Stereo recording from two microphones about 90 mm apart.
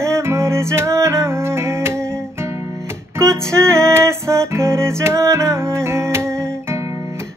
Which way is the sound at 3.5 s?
30° right (ahead or behind).